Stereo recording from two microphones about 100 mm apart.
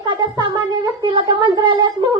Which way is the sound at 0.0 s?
50° right (ahead or behind).